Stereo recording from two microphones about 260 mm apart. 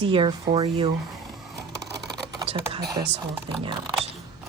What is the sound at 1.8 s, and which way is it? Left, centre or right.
Typing, centre.